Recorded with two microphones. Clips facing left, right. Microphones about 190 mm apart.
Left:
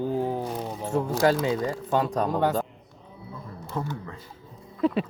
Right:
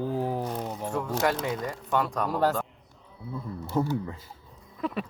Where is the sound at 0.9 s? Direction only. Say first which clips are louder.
Left 5 dB; 30° left (ahead or behind).